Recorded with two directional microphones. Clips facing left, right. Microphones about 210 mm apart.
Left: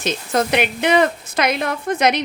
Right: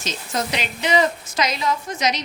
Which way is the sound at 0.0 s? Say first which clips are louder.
Left 7 dB; 55° left (ahead or behind).